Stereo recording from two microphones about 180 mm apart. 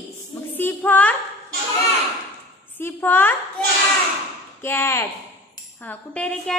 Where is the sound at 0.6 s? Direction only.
10° left (ahead or behind).